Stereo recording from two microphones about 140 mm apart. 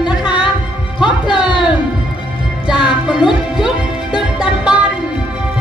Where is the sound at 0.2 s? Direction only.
35° left (ahead or behind).